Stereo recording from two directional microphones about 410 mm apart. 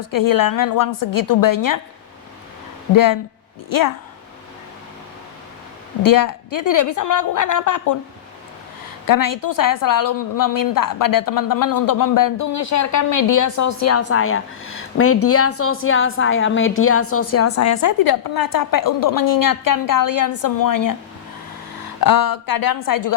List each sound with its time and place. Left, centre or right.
0.0 s a woman's voice: left
2.9 s a woman's voice: left
6.1 s a woman's voice: left
9.0 s a woman's voice: left
22.0 s a woman's voice: left